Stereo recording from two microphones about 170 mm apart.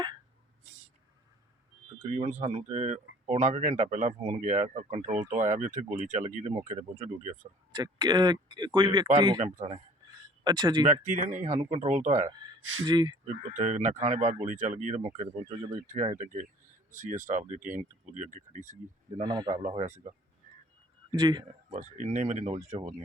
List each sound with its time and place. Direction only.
2.0 s speech: 45° right (ahead or behind)
7.7 s speech: 25° right (ahead or behind)
9.4 s speech: 40° right (ahead or behind)
10.4 s speech: 25° right (ahead or behind)
11.0 s speech: 50° right (ahead or behind)
12.3 s speech: 25° right (ahead or behind)
13.2 s speech: 45° right (ahead or behind)
19.2 s speech: 25° right (ahead or behind)
21.2 s speech: 25° right (ahead or behind)
21.7 s speech: 45° right (ahead or behind)